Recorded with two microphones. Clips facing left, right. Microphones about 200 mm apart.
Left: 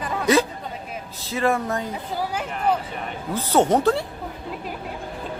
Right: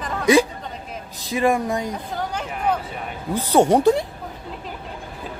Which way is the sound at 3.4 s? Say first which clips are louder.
Right 3 dB; 15° right (ahead or behind).